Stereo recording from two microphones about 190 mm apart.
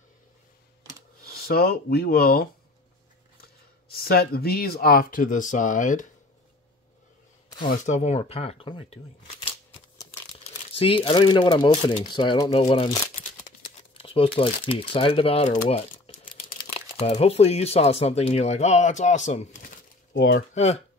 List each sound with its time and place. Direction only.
1.2 s speech: 55° left (ahead or behind)
3.9 s speech: 55° left (ahead or behind)
7.6 s speech: 40° left (ahead or behind)
10.8 s speech: 30° left (ahead or behind)
15.7 s a sound: 30° left (ahead or behind)
17.0 s speech: 35° left (ahead or behind)
20.2 s speech: 55° left (ahead or behind)
20.5 s speech: 35° left (ahead or behind)